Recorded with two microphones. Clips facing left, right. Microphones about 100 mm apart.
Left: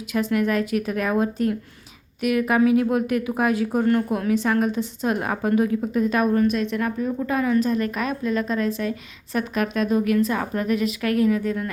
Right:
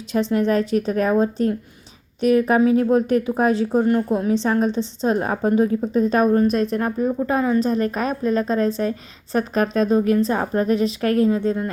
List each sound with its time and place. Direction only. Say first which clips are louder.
0.1 s a woman's voice: right 3 dB; 30° right (ahead or behind)